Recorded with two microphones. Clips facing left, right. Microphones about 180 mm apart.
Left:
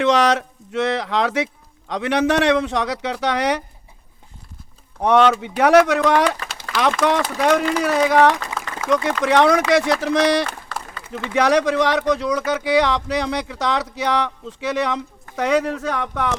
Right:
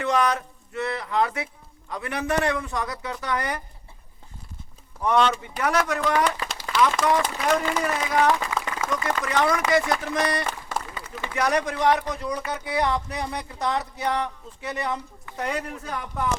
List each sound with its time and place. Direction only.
0.0 s speech: 90° left
4.9 s speech: 80° left
10.7 s a sound: 20° right (ahead or behind)
11.3 s speech: 90° left